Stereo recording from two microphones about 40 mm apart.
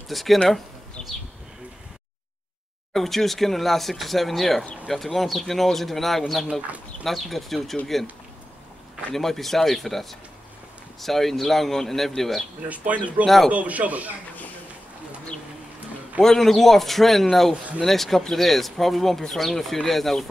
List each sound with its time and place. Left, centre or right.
0.1 s speech: centre
2.9 s speech: centre
9.1 s speech: centre
12.6 s speech: right
16.2 s speech: centre